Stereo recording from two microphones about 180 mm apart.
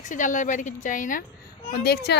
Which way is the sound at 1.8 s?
65° left (ahead or behind).